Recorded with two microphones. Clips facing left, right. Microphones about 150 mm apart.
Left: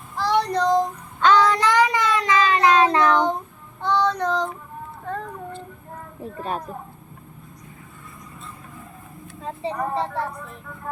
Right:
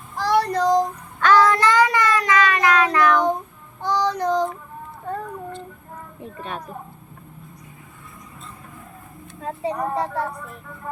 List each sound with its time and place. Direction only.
0.2 s child singing: 10° right (ahead or behind)
1.2 s child singing: 15° left (ahead or behind)
3.8 s child singing: 10° right (ahead or behind)
5.0 s a sound: 15° right (ahead or behind)
9.4 s speech: 10° right (ahead or behind)